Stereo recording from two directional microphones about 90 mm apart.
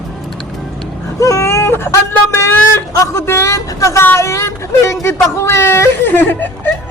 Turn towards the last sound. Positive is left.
turn(degrees=20)  # may be behind; listen again after turning